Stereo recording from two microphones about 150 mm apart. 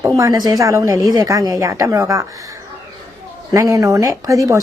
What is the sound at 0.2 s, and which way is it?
A woman's voice, 25° right (ahead or behind).